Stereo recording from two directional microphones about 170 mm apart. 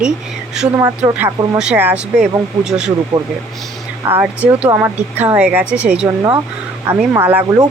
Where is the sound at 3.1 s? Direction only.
20° right (ahead or behind).